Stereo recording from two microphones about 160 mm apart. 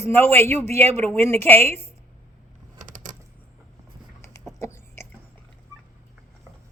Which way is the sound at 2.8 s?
50° right (ahead or behind).